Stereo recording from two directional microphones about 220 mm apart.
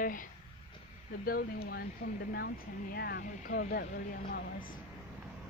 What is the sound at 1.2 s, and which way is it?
Speech, 45° left (ahead or behind).